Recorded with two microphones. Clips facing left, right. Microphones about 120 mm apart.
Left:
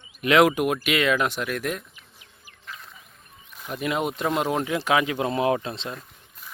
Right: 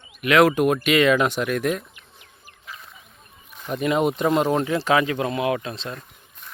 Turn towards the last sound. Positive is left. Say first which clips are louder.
# left 1 dB
turn(degrees=25)  # may be behind; listen again after turning